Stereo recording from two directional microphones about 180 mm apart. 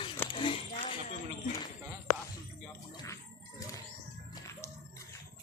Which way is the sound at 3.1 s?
20° left (ahead or behind).